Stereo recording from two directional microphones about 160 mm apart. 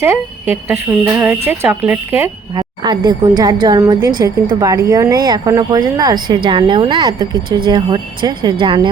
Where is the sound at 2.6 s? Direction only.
25° right (ahead or behind).